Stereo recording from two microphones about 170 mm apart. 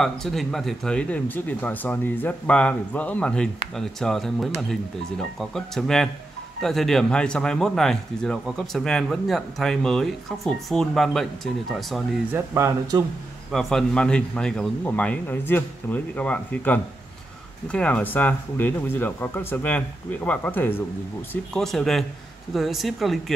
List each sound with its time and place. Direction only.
0.0 s speech: centre (ahead or behind)
12.3 s speech: 15° right (ahead or behind)
13.5 s speech: centre (ahead or behind)